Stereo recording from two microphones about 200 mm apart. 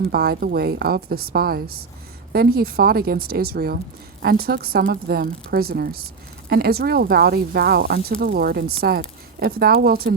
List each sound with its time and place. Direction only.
0.1 s speech: 50° right (ahead or behind)